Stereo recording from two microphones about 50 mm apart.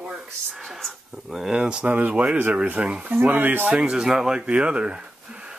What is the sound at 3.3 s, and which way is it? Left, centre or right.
Speech, right.